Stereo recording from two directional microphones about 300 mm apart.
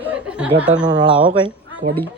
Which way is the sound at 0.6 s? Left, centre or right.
Centre.